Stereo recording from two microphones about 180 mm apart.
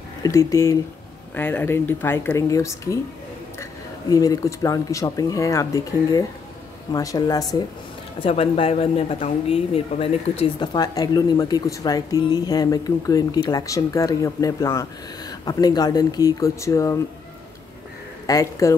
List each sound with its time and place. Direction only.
0.2 s speech: 15° left (ahead or behind)
4.1 s speech: 20° left (ahead or behind)
8.2 s speech: 30° left (ahead or behind)
18.2 s speech: 20° left (ahead or behind)